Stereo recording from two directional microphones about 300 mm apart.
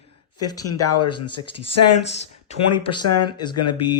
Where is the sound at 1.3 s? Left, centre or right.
Left.